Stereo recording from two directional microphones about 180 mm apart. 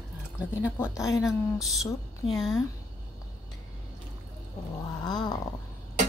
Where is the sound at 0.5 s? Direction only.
15° left (ahead or behind).